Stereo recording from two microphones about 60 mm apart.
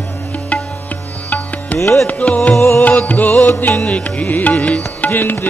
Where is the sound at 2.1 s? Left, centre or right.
Left.